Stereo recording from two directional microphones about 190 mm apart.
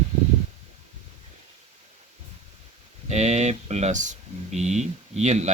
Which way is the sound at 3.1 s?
35° right (ahead or behind).